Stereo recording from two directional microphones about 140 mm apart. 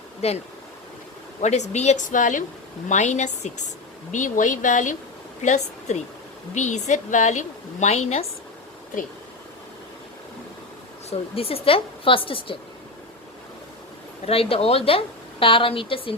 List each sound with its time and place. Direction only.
0.2 s a woman's voice: 50° left (ahead or behind); by 4.9 s 65° left (ahead or behind)
5.4 s a woman's voice: 55° left (ahead or behind)
11.1 s a woman's voice: 45° left (ahead or behind)
14.3 s a woman's voice: 45° left (ahead or behind)